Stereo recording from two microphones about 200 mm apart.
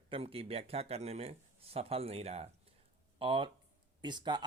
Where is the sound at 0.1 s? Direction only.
30° right (ahead or behind).